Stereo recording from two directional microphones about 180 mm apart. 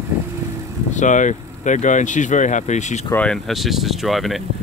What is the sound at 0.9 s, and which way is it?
Speech, 45° left (ahead or behind).